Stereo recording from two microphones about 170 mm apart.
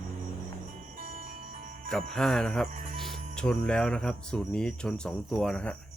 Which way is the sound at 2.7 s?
50° right (ahead or behind).